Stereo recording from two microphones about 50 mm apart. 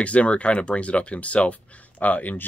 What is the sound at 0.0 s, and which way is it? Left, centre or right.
Speech, left.